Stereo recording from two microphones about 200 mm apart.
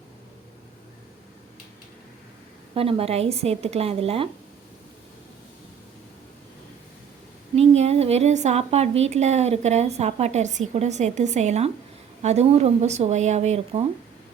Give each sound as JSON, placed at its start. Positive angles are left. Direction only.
{"t": 2.7, "sound": "speech", "side_deg": -30}
{"t": 7.5, "sound": "speech", "side_deg": -30}